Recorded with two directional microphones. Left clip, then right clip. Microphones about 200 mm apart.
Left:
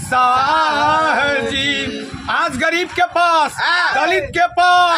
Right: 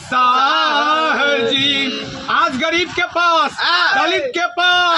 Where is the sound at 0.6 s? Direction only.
30° left (ahead or behind).